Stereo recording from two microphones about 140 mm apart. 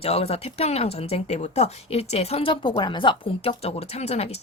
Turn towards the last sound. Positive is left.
turn(degrees=50)  # may be behind; listen again after turning